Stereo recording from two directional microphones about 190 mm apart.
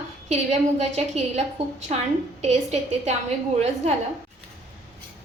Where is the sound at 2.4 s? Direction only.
35° right (ahead or behind).